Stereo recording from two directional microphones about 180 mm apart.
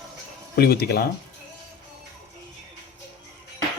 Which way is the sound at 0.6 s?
60° left (ahead or behind).